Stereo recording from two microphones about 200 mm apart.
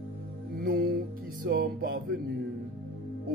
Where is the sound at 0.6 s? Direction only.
45° right (ahead or behind).